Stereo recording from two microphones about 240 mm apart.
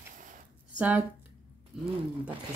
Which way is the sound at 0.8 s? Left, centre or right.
Centre.